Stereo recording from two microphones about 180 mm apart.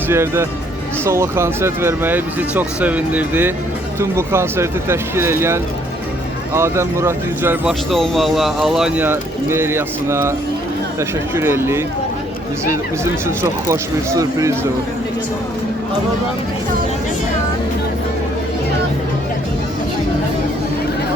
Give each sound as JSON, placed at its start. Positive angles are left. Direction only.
{"t": 0.1, "sound": "speech", "side_deg": -15}
{"t": 7.7, "sound": "speech", "side_deg": 0}
{"t": 11.3, "sound": "speech", "side_deg": -15}
{"t": 13.2, "sound": "speech", "side_deg": -15}